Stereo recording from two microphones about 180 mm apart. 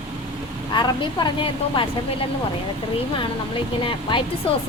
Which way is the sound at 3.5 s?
30° left (ahead or behind).